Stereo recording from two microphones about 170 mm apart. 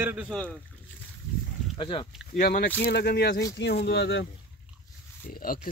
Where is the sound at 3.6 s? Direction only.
80° left.